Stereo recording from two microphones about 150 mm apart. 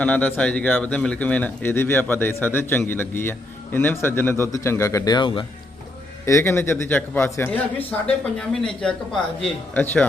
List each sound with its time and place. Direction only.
0.0 s speech: 10° left (ahead or behind); by 5.5 s 35° left (ahead or behind)
6.2 s speech: 20° left (ahead or behind)